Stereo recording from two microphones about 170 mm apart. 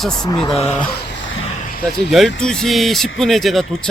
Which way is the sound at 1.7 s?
60° left (ahead or behind).